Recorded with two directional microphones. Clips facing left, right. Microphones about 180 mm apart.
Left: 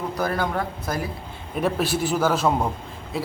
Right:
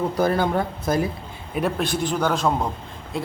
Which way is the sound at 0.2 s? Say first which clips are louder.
Right 4 dB; 25° right (ahead or behind).